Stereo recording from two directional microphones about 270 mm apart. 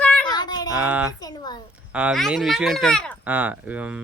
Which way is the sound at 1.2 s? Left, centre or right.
Centre.